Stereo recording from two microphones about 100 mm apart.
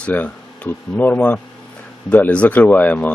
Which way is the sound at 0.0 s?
15° left (ahead or behind).